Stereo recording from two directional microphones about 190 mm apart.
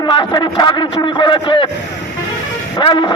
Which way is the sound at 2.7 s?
25° left (ahead or behind).